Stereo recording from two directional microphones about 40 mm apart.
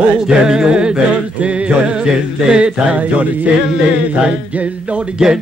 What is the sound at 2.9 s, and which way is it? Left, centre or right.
Music, right.